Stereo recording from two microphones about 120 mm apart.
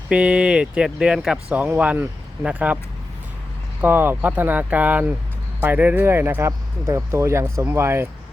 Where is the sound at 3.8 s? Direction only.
15° right (ahead or behind).